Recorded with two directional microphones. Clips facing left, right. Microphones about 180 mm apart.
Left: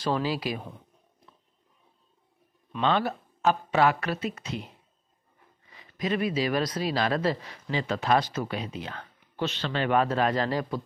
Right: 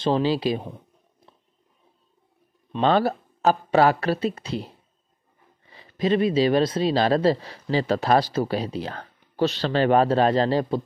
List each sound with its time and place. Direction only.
0.0 s speech: 25° right (ahead or behind)
2.8 s speech: 35° right (ahead or behind)